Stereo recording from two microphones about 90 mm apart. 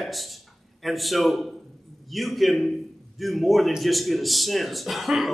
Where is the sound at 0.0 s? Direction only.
Centre (ahead or behind).